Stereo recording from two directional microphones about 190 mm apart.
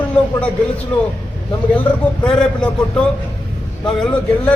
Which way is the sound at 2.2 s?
5° left (ahead or behind).